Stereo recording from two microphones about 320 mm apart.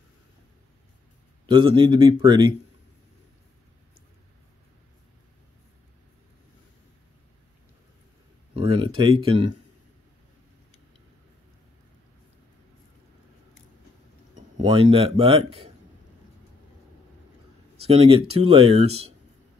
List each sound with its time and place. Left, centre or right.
1.4 s speech: centre
8.5 s a sound: centre
14.3 s speech: centre
17.8 s speech: centre